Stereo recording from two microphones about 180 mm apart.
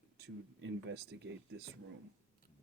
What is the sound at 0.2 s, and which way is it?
Speech, 80° right.